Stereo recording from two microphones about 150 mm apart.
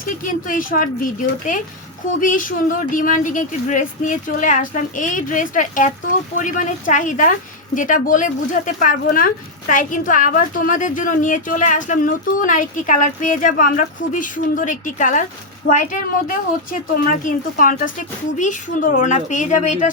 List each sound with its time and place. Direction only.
0.0 s speech: 65° left (ahead or behind)
2.2 s speech: 65° left (ahead or behind)